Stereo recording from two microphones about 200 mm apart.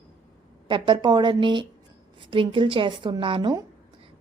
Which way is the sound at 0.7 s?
25° right (ahead or behind).